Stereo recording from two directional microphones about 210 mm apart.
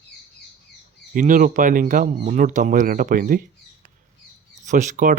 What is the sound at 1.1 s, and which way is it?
Speech, 40° right (ahead or behind).